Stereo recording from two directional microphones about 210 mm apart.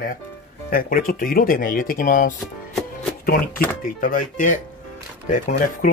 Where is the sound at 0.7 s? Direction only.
45° left (ahead or behind).